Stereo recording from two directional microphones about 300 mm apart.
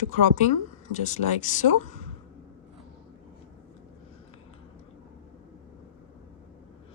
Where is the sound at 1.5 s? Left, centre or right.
Left.